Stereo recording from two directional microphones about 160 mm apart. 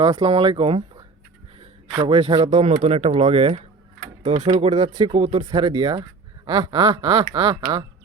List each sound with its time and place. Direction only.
0.2 s speech: 35° right (ahead or behind)
4.4 s speech: 25° right (ahead or behind)
4.6 s speech: 40° right (ahead or behind)